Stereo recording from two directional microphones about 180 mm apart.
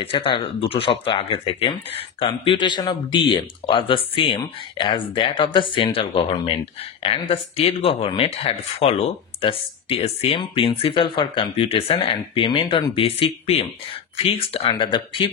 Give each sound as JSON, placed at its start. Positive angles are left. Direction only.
{"t": 0.0, "sound": "speech", "side_deg": 30}